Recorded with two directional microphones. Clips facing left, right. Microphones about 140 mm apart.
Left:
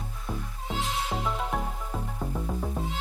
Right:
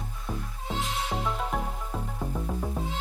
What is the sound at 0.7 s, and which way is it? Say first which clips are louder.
Music: even; centre (ahead or behind).